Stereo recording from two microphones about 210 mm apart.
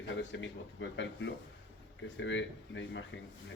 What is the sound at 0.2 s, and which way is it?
Speech, 60° left (ahead or behind).